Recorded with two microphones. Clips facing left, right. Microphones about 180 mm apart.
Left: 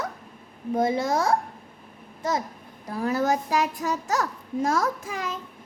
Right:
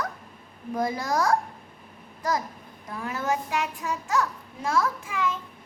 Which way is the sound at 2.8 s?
35° left (ahead or behind).